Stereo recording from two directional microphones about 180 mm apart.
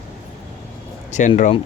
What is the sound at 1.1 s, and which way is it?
Speech, 40° left (ahead or behind).